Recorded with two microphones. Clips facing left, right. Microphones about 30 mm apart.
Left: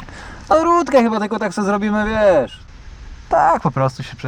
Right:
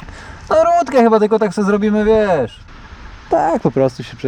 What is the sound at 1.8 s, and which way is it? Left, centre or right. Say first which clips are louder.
Speech: right 1 dB; centre.